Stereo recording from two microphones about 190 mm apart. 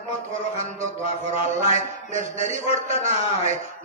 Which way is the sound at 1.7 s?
40° right (ahead or behind).